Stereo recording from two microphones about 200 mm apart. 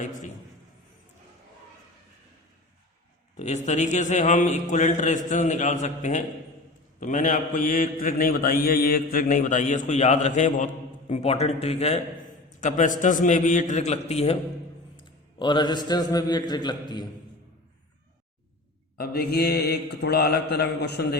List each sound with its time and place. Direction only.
3.3 s mantra: 35° left (ahead or behind)
12.5 s a man's voice: 40° left (ahead or behind)
13.0 s mantra: 40° left (ahead or behind)
14.9 s a man's voice: 25° left (ahead or behind)
18.9 s a man's voice: 50° left (ahead or behind)